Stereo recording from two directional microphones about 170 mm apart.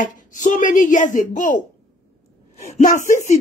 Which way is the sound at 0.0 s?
50° left (ahead or behind).